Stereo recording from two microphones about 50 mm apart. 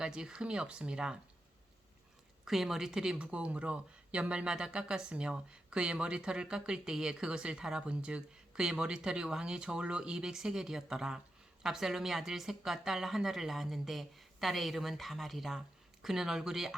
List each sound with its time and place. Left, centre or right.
0.0 s speech: centre
2.4 s speech: centre
3.2 s speech: right; by 16.7 s centre